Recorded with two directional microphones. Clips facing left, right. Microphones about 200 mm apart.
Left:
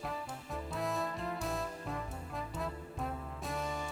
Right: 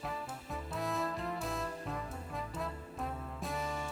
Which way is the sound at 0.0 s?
Centre (ahead or behind).